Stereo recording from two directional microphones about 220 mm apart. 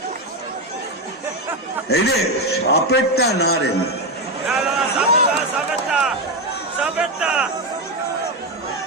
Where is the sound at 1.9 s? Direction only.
50° left (ahead or behind).